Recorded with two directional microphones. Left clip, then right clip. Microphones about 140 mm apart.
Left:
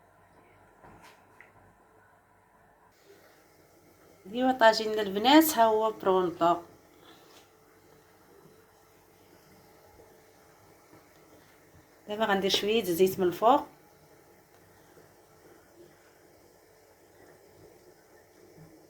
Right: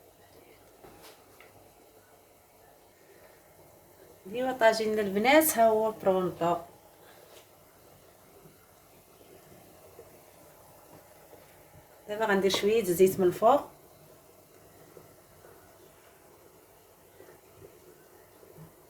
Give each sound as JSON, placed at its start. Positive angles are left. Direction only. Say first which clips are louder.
{"t": 4.4, "sound": "a woman's voice", "louder": "left 2 dB", "side_deg": 10}
{"t": 12.0, "sound": "speech", "louder": "right 1 dB", "side_deg": 20}